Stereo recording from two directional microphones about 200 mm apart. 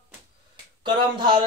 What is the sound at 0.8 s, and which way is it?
Speech, 20° right (ahead or behind).